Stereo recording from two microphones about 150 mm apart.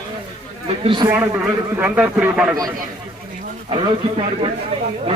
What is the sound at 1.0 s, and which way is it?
A man's voice, 15° right (ahead or behind).